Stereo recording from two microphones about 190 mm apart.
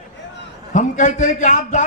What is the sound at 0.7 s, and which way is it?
A man's voice, 40° left (ahead or behind).